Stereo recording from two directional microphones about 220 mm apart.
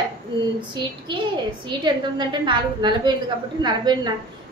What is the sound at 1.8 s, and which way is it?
A woman's voice, 20° right (ahead or behind).